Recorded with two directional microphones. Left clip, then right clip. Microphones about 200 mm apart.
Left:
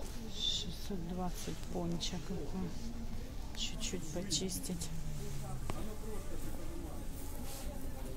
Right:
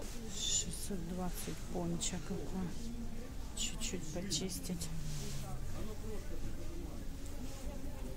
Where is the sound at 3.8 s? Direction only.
Centre (ahead or behind).